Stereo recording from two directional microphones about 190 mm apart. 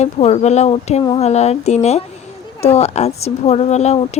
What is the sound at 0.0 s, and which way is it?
Speech, 35° left (ahead or behind).